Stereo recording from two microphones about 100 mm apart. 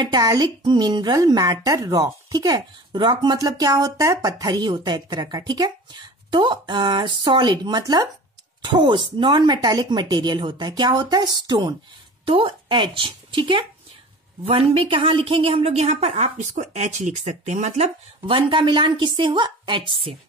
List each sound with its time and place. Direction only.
0.0 s a woman's voice: 40° right (ahead or behind)
8.6 s a woman's voice: 50° right (ahead or behind)
12.3 s speech: 60° right (ahead or behind)
14.5 s a woman's voice: 80° right
17.6 s a woman's voice: 90° right; by 20.2 s 55° right (ahead or behind)